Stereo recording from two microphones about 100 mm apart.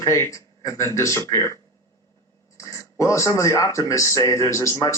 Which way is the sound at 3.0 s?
30° left (ahead or behind).